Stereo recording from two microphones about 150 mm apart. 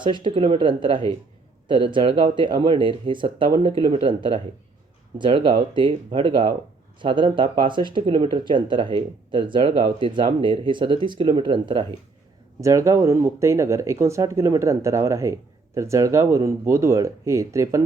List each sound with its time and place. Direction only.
0.0 s speech: 35° right (ahead or behind)
12.5 s speech: 20° right (ahead or behind)